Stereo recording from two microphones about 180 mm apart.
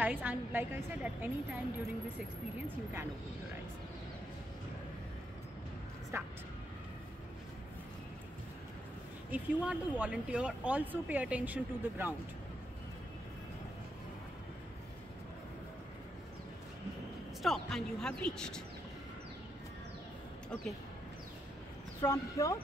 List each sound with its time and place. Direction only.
0.0 s speech: 10° right (ahead or behind)
6.1 s speech: 15° right (ahead or behind)
9.3 s speech: 10° right (ahead or behind)
17.4 s speech: centre (ahead or behind)
22.0 s speech: 15° left (ahead or behind)